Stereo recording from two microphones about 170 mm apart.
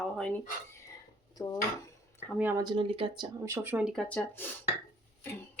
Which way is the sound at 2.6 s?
30° right (ahead or behind).